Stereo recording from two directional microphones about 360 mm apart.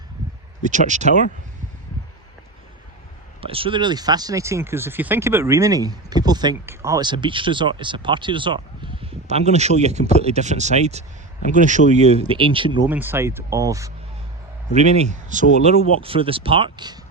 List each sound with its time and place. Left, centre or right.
0.6 s speech: centre
3.4 s speech: centre